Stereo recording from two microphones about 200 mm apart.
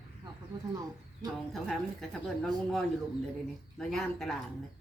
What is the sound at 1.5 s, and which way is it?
Speech, centre (ahead or behind).